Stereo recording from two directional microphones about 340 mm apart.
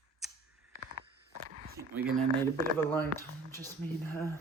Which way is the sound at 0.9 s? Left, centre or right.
Right.